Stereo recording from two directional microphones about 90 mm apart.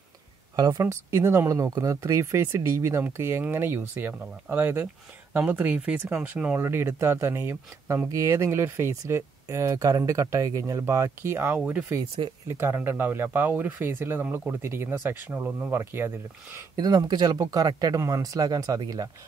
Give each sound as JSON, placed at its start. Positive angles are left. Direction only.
{"t": 0.7, "sound": "speech", "side_deg": -30}
{"t": 12.4, "sound": "speech", "side_deg": -25}
{"t": 16.7, "sound": "speech", "side_deg": -50}